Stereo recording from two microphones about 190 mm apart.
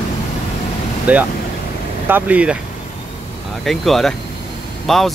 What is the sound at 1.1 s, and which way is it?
Speech, 5° right (ahead or behind).